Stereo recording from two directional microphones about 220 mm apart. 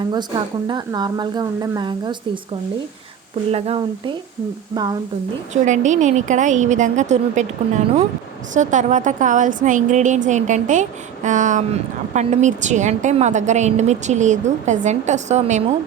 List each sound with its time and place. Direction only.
0.1 s speech: 20° right (ahead or behind)
3.5 s speech: 25° right (ahead or behind)
5.6 s a woman's voice: 35° right (ahead or behind)
8.5 s a woman's voice: 35° right (ahead or behind)